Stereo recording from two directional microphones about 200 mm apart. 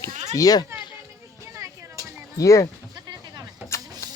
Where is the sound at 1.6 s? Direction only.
15° right (ahead or behind).